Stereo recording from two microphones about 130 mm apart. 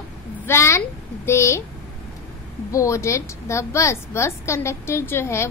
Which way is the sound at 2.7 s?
25° left (ahead or behind).